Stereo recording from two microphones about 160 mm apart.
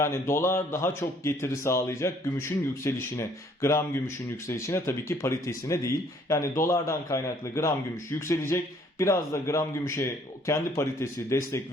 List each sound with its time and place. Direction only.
0.0 s a man's voice: 15° left (ahead or behind)